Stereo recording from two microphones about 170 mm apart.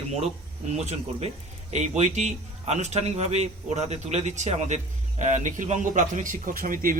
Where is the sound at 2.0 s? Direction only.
40° right (ahead or behind).